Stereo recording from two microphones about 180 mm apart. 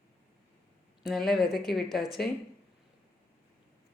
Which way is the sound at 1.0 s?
Centre (ahead or behind).